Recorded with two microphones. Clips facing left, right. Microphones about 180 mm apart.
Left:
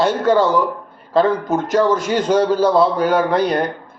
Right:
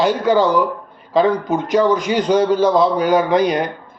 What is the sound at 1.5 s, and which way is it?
A man's voice, centre (ahead or behind).